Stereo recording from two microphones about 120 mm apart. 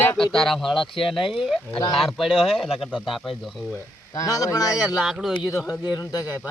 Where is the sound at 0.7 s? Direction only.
45° left (ahead or behind).